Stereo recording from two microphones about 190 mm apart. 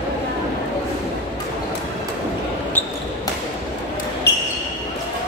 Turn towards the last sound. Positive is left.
turn(degrees=60)  # may be behind; listen again after turning